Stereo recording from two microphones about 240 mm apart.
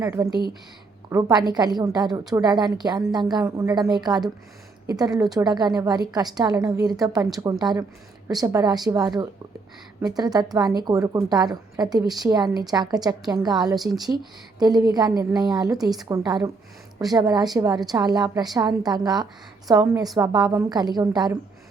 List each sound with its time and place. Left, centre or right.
0.0 s a woman's voice: centre
0.3 s speech: centre
1.1 s a woman's voice: centre
13.7 s speech: centre
14.6 s a woman's voice: centre